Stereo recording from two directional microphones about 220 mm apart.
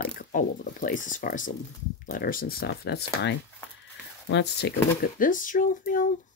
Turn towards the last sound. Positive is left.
turn(degrees=40)  # may be behind; listen again after turning